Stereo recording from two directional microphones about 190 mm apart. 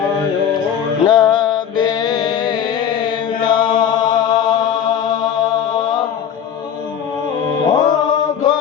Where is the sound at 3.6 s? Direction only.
45° left (ahead or behind).